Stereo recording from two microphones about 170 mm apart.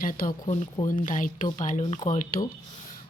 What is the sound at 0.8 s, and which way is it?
A woman's voice, 50° left (ahead or behind).